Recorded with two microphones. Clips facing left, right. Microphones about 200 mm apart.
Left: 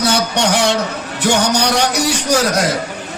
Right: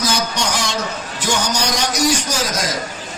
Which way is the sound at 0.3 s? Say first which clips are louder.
Left 7 dB; 65° left (ahead or behind).